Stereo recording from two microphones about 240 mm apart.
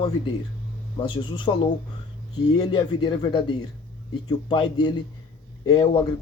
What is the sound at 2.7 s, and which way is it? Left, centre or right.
Speech, centre.